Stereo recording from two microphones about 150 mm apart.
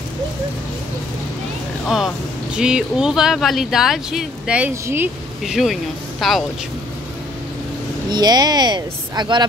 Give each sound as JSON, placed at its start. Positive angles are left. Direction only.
{"t": 1.9, "sound": "speech", "side_deg": 0}
{"t": 5.4, "sound": "speech", "side_deg": 0}
{"t": 8.1, "sound": "speech", "side_deg": -25}